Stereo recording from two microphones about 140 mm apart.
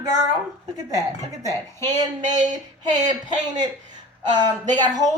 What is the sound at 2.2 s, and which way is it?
Speech, 60° right (ahead or behind).